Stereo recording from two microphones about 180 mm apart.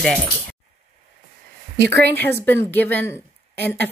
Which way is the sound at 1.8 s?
65° right (ahead or behind).